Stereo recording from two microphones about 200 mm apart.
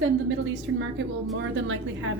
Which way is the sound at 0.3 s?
65° right (ahead or behind).